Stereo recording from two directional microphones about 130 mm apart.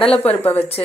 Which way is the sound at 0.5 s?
50° left (ahead or behind).